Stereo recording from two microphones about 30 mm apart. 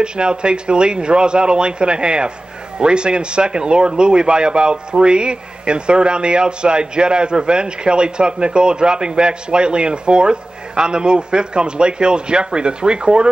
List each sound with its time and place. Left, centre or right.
0.0 s speech: right